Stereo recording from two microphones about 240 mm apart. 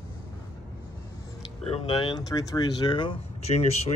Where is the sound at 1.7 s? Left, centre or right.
Left.